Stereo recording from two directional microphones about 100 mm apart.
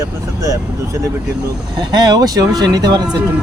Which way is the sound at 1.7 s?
45° right (ahead or behind).